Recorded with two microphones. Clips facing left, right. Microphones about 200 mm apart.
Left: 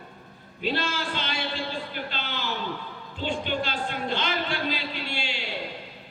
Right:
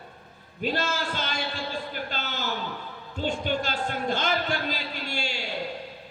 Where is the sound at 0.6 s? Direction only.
45° right (ahead or behind).